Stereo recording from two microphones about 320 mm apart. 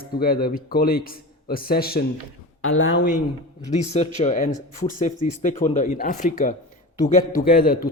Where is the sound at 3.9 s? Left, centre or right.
Left.